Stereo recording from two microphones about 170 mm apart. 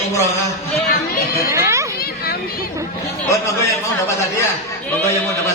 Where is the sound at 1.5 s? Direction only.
15° right (ahead or behind).